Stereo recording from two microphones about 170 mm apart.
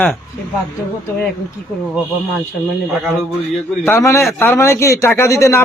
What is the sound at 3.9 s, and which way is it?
Speech, 15° left (ahead or behind).